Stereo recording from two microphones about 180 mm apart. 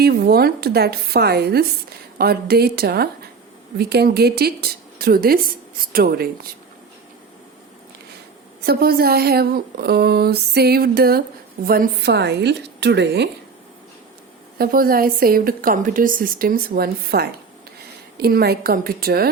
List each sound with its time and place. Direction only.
0.0 s a woman's voice: 60° right (ahead or behind)
8.6 s a woman's voice: 60° right (ahead or behind)
14.6 s a woman's voice: 55° right (ahead or behind)